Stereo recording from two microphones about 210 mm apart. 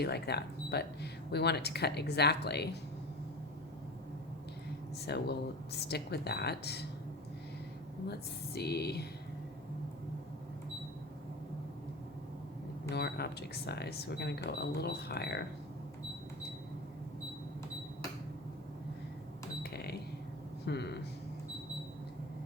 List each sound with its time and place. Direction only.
0.0 s speech: 50° left (ahead or behind)
5.0 s speech: 50° left (ahead or behind)
8.5 s speech: 50° left (ahead or behind)
12.9 s speech: 50° left (ahead or behind)
19.7 s cash register: 50° left (ahead or behind)
20.7 s a sound: 55° left (ahead or behind)